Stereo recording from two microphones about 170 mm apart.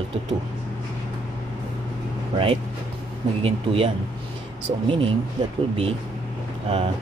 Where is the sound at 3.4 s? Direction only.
35° right (ahead or behind).